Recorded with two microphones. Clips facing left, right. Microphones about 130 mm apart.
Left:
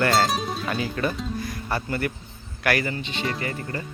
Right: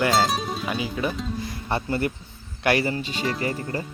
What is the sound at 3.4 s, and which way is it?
Speech, 30° right (ahead or behind).